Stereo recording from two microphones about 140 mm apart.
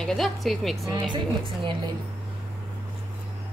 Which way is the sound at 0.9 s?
35° right (ahead or behind).